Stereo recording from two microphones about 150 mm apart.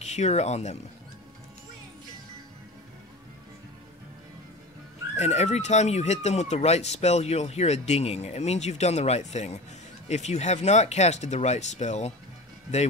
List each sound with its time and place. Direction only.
0.0 s speech: 50° left (ahead or behind)
5.1 s speech: 50° left (ahead or behind)